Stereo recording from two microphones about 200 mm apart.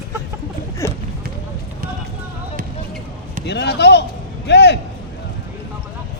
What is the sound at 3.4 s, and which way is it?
Speech, 60° left (ahead or behind).